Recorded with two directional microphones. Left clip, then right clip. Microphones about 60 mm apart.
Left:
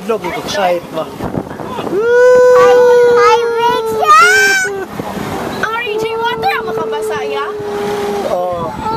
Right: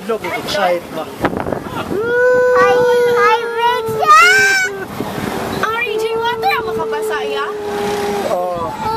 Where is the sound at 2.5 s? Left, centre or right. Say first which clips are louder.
Left 5 dB; left.